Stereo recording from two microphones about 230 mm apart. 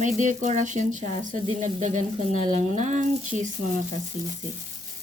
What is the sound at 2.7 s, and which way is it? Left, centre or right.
Speech, right.